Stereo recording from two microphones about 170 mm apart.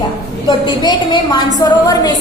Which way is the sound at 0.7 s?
25° left (ahead or behind).